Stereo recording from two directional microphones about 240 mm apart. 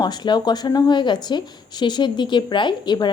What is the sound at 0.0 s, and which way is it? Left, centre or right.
A woman's voice, centre.